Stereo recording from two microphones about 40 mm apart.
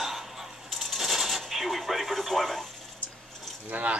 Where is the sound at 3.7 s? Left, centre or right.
Right.